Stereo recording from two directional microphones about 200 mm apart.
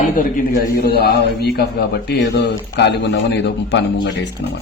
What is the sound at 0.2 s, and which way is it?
A man's voice, 45° left (ahead or behind).